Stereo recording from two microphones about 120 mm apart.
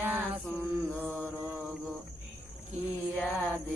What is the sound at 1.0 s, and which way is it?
Mantra, 15° right (ahead or behind).